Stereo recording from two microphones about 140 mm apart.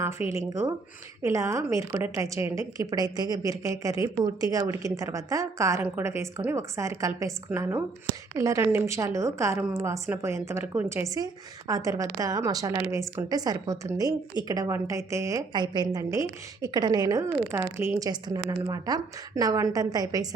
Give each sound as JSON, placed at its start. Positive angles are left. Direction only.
{"t": 0.0, "sound": "a woman's voice", "side_deg": -20}